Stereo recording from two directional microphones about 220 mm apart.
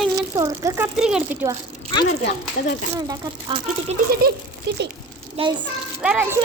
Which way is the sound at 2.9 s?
15° right (ahead or behind).